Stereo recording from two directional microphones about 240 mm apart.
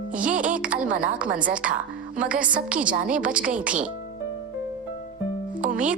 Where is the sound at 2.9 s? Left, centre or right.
Right.